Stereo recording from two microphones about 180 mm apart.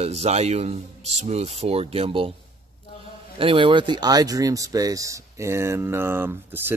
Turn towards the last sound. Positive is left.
turn(degrees=-10)  # may be behind; listen again after turning